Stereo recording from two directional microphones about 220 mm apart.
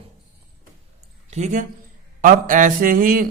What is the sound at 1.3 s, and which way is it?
A man's voice, 30° right (ahead or behind).